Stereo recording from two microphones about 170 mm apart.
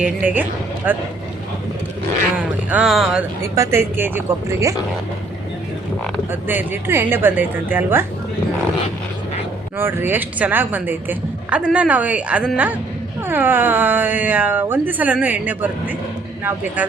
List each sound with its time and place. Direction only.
0.0 s a woman's voice: 10° right (ahead or behind)
2.3 s speech: 10° right (ahead or behind)
3.5 s a woman's voice: 15° right (ahead or behind)
6.5 s a woman's voice: 10° right (ahead or behind)
9.7 s a woman's voice: 10° right (ahead or behind)